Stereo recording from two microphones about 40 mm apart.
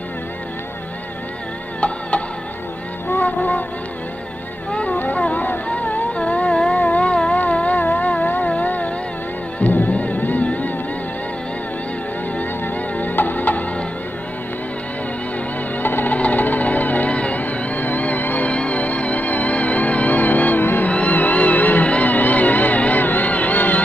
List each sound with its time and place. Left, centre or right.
1.8 s music: left
3.1 s music: left
5.1 s a sound: left
8.5 s music: left
12.9 s music: left
15.8 s music: left
16.2 s music: left
17.1 s music: left
18.5 s music: left
23.0 s music: left